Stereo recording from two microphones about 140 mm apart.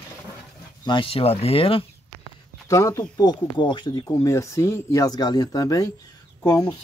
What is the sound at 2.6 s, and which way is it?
Speech, 25° left (ahead or behind).